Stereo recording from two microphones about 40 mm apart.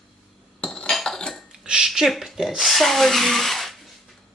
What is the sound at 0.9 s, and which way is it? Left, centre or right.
Cutlery, centre.